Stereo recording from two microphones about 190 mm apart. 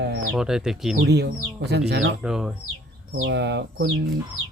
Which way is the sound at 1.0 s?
60° right (ahead or behind).